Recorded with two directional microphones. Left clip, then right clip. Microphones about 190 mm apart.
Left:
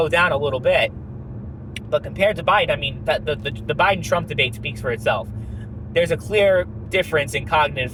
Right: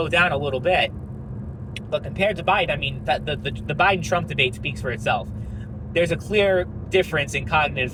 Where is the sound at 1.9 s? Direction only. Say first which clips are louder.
Left 4 dB; 30° left (ahead or behind).